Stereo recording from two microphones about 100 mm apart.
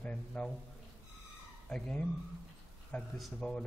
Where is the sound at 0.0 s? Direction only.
10° left (ahead or behind).